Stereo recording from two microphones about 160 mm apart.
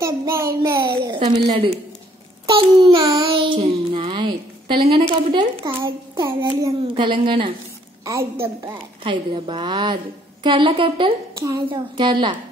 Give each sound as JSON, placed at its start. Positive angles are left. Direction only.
{"t": 0.0, "sound": "a child's voice", "side_deg": -20}
{"t": 1.3, "sound": "child singing", "side_deg": -30}
{"t": 6.2, "sound": "a woman's voice", "side_deg": -20}
{"t": 7.1, "sound": "child singing", "side_deg": -30}
{"t": 8.0, "sound": "a woman's voice", "side_deg": -20}
{"t": 9.0, "sound": "a woman's voice", "side_deg": -30}
{"t": 10.4, "sound": "child singing", "side_deg": -30}